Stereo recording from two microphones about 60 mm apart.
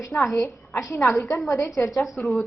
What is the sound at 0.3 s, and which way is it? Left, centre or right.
A woman's voice, left.